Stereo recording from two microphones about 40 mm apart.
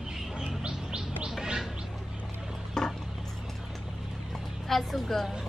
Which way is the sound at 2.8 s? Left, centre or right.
Centre.